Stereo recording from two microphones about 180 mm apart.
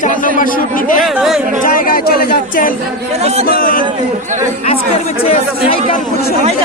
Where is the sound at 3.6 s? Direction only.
50° left (ahead or behind).